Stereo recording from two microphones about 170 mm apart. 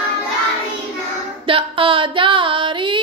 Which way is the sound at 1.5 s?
30° right (ahead or behind).